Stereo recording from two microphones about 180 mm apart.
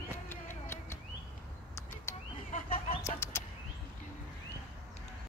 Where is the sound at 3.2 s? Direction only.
15° left (ahead or behind).